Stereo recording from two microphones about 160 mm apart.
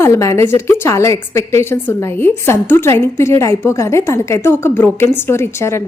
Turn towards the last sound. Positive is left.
turn(degrees=15)  # may be behind; listen again after turning